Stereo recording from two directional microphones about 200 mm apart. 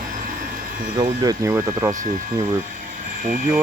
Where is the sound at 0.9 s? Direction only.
20° right (ahead or behind).